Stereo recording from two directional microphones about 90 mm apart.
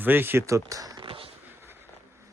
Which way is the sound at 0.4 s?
40° right (ahead or behind).